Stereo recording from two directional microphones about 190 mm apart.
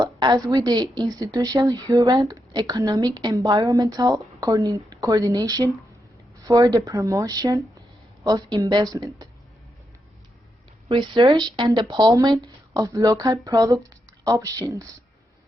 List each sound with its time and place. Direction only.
0.0 s a woman's voice: 20° right (ahead or behind)
10.8 s a woman's voice: 30° right (ahead or behind)